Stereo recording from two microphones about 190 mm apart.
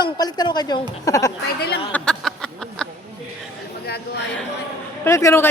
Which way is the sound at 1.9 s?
5° left (ahead or behind).